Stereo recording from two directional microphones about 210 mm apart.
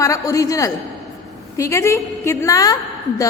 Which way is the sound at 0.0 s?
15° left (ahead or behind).